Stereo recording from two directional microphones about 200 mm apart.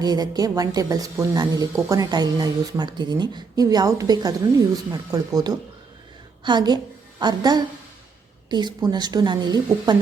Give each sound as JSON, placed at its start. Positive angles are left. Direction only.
{"t": 0.0, "sound": "a woman's voice", "side_deg": -20}